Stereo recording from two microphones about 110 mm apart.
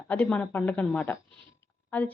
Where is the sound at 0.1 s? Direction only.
15° left (ahead or behind).